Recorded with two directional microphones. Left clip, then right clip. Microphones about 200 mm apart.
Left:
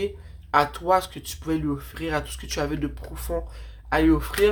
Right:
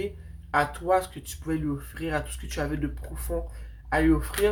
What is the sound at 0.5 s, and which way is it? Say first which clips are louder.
Speech: left 3 dB; 35° left (ahead or behind).